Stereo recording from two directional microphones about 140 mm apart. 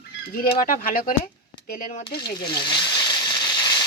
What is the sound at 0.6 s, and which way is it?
Speech, 75° left (ahead or behind).